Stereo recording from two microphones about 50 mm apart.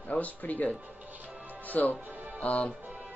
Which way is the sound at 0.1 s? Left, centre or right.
Left.